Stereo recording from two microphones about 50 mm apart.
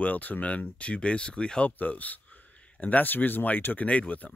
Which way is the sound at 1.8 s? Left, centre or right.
Left.